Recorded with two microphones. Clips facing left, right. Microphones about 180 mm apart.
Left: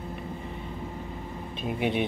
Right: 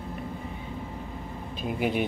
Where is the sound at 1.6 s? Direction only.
Centre (ahead or behind).